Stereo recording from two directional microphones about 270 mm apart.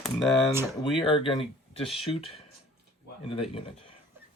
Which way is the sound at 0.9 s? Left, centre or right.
Centre.